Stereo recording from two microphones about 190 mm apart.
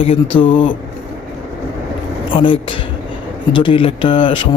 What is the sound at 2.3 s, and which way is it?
A man's voice, 25° left (ahead or behind).